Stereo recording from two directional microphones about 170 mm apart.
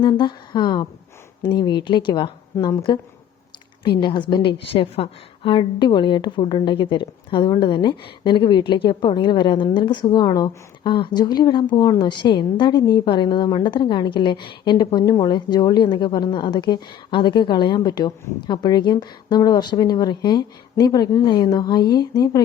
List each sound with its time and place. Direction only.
0.0 s a woman's voice: 25° left (ahead or behind)